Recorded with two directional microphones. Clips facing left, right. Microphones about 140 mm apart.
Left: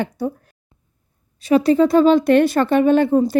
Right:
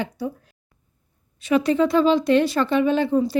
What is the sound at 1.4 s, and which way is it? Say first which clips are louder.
A woman's voice: left 5 dB; 35° left (ahead or behind).